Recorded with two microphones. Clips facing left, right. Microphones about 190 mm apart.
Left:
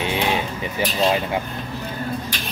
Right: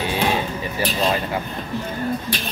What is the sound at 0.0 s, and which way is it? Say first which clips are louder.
Vehicle: right 1 dB; 20° left (ahead or behind).